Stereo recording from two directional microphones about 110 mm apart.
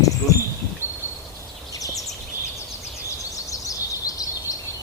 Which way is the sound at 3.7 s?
35° left (ahead or behind).